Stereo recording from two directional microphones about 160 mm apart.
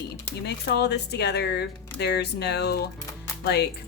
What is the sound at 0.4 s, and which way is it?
A woman's voice, 90° left.